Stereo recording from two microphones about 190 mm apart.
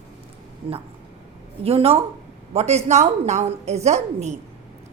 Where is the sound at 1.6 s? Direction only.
30° right (ahead or behind).